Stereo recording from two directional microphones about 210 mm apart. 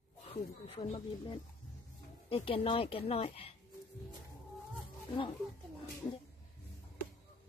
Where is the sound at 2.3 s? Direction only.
25° left (ahead or behind).